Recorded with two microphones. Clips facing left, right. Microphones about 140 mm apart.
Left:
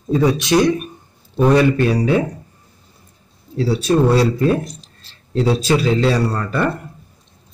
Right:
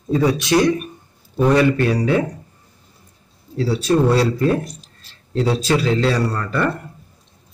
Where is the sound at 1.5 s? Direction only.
15° left (ahead or behind).